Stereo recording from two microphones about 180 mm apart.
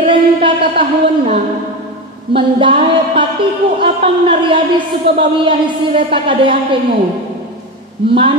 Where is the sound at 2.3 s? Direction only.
30° right (ahead or behind).